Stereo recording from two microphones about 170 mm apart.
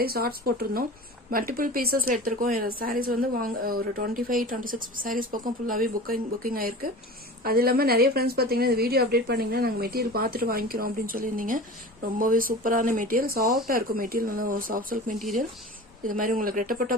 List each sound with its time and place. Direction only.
0.0 s a woman's voice: 65° right (ahead or behind)